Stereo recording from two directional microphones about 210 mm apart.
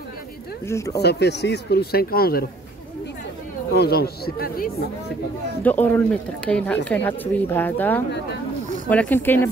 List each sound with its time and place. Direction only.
0.7 s speech: 15° left (ahead or behind)
0.9 s speech: 50° left (ahead or behind)
3.7 s speech: 50° left (ahead or behind)
5.6 s speech: 10° left (ahead or behind)